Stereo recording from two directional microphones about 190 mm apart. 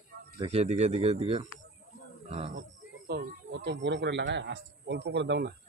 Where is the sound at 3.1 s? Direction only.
60° right (ahead or behind).